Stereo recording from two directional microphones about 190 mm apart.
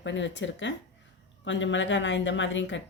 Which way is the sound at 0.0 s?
70° left (ahead or behind).